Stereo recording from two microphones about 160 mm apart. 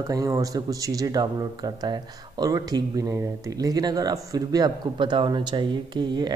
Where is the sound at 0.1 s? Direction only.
20° right (ahead or behind).